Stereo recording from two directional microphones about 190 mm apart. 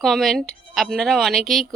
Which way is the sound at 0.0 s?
Centre (ahead or behind).